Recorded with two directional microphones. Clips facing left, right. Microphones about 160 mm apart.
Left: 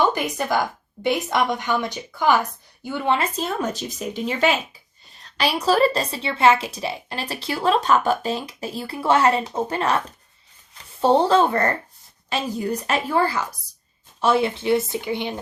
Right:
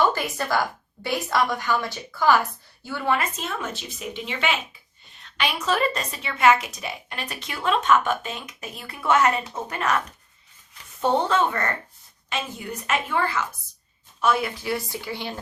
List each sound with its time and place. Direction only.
0.0 s a woman's voice: 20° left (ahead or behind)
11.0 s a woman's voice: 30° left (ahead or behind)